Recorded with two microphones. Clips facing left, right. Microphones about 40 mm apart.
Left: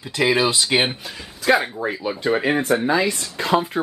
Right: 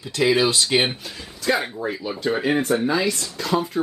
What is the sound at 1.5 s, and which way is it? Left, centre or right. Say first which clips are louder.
Speech: left 4 dB; left.